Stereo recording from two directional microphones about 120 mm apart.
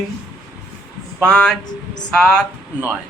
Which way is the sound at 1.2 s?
5° left (ahead or behind).